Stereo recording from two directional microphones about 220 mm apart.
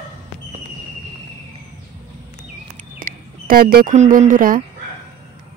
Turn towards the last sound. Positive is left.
turn(degrees=-40)  # may be behind; listen again after turning